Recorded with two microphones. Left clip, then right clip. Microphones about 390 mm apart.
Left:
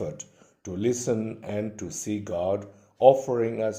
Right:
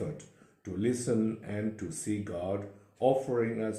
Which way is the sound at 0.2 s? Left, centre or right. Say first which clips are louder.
Left 7 dB; left.